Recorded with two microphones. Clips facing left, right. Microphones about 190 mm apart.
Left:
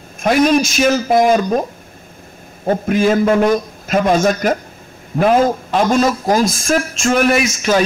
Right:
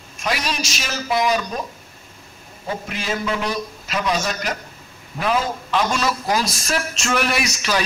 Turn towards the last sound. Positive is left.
turn(degrees=50)  # may be behind; listen again after turning